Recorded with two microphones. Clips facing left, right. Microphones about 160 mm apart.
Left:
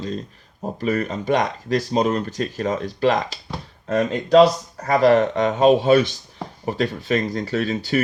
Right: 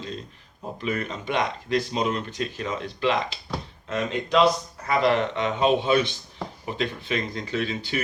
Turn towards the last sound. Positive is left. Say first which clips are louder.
# left 6 dB
turn(degrees=45)  # may be behind; listen again after turning